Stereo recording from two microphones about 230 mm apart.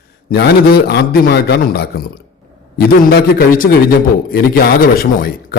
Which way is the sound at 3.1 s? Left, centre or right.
Left.